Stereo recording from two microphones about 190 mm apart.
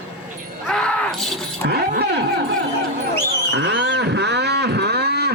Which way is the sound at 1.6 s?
60° right (ahead or behind).